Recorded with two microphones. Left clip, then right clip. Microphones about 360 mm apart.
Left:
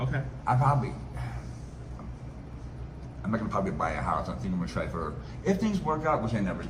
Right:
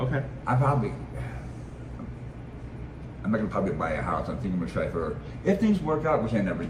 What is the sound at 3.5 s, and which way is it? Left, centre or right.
A man's voice, centre.